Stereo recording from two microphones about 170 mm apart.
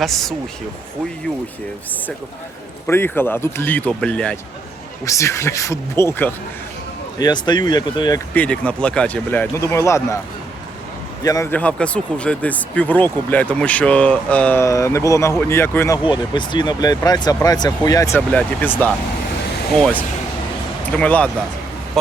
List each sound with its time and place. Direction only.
0.0 s speech: centre (ahead or behind)
2.8 s speech: 15° left (ahead or behind)
5.0 s speech: 15° left (ahead or behind)
7.2 s speech: 25° left (ahead or behind)
8.3 s speech: 10° left (ahead or behind)
11.2 s a man's voice: 20° left (ahead or behind)
11.5 s speech: 5° left (ahead or behind)
16.0 s speech: 25° left (ahead or behind)
18.3 s speech: 10° left (ahead or behind)